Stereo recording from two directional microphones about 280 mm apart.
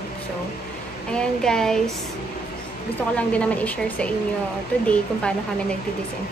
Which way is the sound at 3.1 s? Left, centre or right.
Centre.